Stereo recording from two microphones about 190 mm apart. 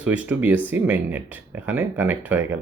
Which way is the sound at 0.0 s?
5° right (ahead or behind).